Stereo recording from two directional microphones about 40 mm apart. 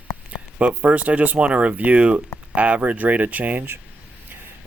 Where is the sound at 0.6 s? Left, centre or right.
Right.